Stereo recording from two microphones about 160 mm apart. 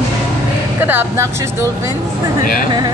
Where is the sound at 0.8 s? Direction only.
15° right (ahead or behind).